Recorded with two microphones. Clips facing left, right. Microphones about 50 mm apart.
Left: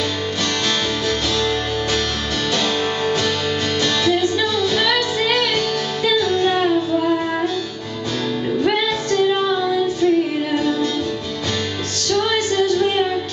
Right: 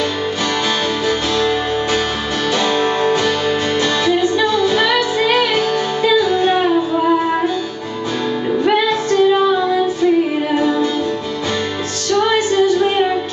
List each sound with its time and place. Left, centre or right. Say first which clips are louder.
2.6 s music: right 5 dB; centre
12.1 s music: right 4 dB; centre